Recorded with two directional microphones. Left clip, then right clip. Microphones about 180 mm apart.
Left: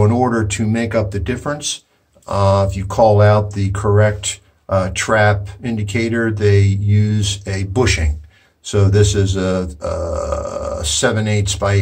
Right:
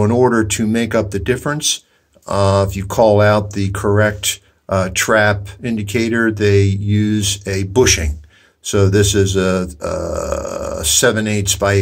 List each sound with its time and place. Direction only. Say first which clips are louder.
0.0 s speech: right 3 dB; 45° right (ahead or behind)